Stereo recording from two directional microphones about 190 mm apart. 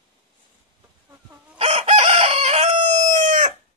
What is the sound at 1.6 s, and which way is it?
Chicken, 35° right (ahead or behind).